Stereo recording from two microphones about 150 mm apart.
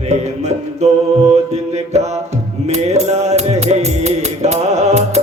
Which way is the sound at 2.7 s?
45° right (ahead or behind).